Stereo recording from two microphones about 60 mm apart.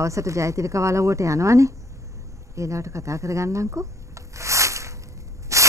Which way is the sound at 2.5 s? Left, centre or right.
Right.